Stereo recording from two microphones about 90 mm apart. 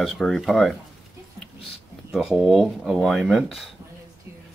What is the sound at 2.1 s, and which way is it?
Speech, 5° right (ahead or behind).